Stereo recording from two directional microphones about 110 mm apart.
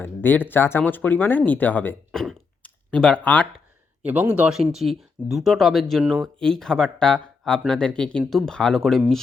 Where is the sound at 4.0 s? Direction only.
15° right (ahead or behind).